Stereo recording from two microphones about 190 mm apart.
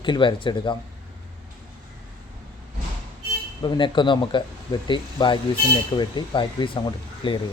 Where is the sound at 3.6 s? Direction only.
25° left (ahead or behind).